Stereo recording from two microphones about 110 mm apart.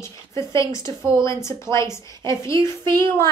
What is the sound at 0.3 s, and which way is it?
A woman's voice, 25° left (ahead or behind).